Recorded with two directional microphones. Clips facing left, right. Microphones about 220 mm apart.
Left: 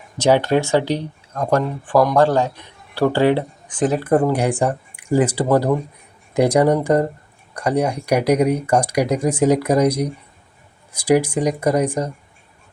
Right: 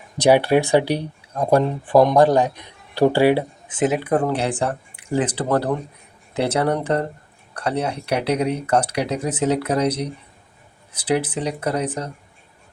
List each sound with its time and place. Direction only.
0.2 s speech: 15° right (ahead or behind)
3.7 s speech: 20° right (ahead or behind)
4.3 s speech: 10° left (ahead or behind)